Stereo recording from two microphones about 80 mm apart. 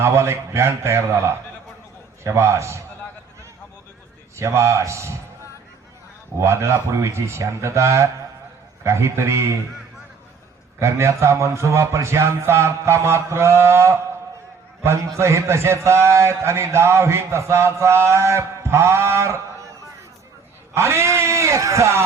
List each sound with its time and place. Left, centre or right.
0.0 s a man's voice: right
4.4 s a man's voice: right
6.4 s a man's voice: right
10.8 s a man's voice: right
20.7 s a man's voice: right